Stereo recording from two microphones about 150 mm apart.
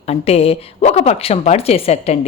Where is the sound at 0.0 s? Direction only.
45° left (ahead or behind).